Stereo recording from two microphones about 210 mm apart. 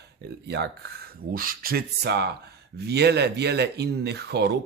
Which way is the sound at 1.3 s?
45° right (ahead or behind).